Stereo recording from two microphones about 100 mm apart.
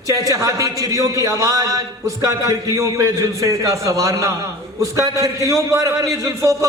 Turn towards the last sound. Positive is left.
turn(degrees=-35)  # may be behind; listen again after turning